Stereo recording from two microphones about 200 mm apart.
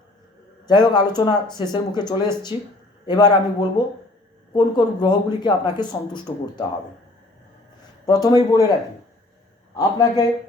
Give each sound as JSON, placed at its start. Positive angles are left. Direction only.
{"t": 0.7, "sound": "speech", "side_deg": 20}
{"t": 8.0, "sound": "speech", "side_deg": 20}
{"t": 9.7, "sound": "speech", "side_deg": 20}